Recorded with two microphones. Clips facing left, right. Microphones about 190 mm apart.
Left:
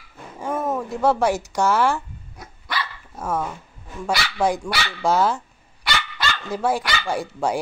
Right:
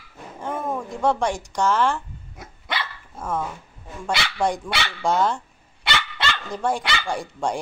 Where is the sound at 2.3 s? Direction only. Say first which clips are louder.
Left 1 dB; 20° right (ahead or behind).